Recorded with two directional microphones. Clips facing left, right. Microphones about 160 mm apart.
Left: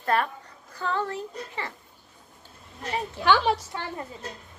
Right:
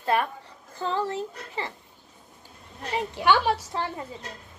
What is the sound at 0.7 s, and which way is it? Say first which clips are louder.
Speech: right 1 dB; 30° right (ahead or behind).